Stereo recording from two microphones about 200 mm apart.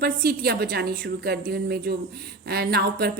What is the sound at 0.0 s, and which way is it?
A woman's voice, 50° right (ahead or behind).